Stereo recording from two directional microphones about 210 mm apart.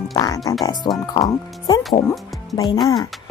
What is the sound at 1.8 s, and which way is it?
Music, centre (ahead or behind).